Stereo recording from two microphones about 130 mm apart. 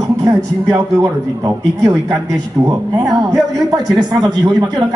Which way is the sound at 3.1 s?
30° right (ahead or behind).